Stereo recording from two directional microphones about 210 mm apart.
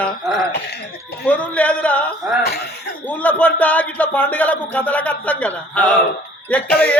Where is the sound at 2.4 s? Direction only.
50° left (ahead or behind).